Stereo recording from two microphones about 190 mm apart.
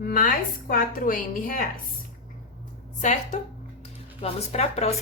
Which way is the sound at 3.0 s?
40° left (ahead or behind).